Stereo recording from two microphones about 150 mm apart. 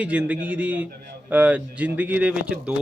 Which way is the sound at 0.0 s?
10° right (ahead or behind).